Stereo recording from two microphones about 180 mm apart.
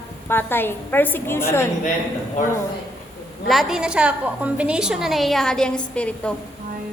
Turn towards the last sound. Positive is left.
turn(degrees=5)  # may be behind; listen again after turning